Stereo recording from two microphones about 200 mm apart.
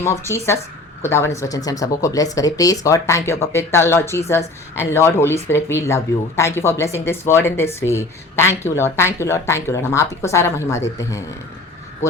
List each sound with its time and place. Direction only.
0.0 s speech: 15° left (ahead or behind)